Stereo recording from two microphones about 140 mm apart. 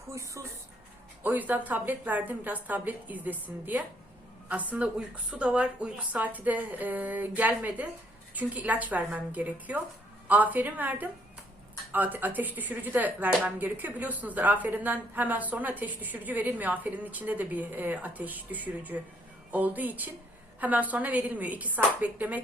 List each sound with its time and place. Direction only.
0.1 s speech: 20° right (ahead or behind)